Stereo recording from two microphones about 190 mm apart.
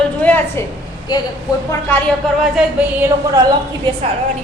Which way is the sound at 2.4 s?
5° right (ahead or behind).